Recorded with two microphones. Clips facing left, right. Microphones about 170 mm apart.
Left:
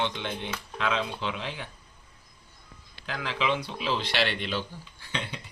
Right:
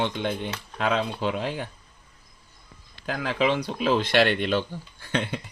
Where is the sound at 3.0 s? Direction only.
45° right (ahead or behind).